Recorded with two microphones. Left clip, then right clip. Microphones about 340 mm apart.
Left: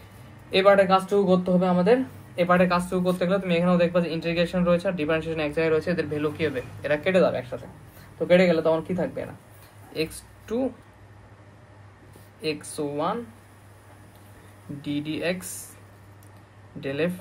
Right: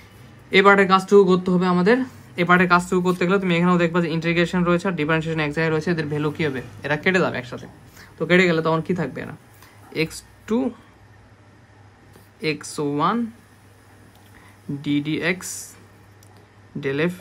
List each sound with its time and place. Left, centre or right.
0.5 s speech: right
12.4 s speech: right
14.8 s speech: right
16.8 s speech: centre